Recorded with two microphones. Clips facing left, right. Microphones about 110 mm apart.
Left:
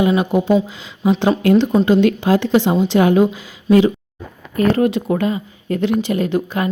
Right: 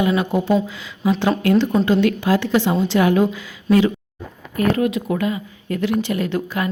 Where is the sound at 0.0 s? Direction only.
20° left (ahead or behind).